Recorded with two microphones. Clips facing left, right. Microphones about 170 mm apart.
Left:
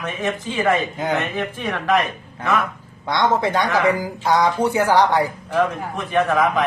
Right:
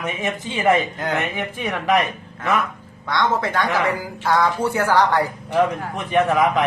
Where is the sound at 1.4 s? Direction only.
10° right (ahead or behind).